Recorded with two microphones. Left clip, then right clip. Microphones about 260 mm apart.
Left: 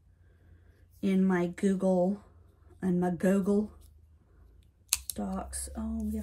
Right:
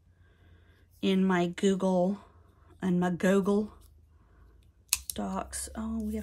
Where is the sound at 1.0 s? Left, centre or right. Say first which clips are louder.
Right 2 dB; centre.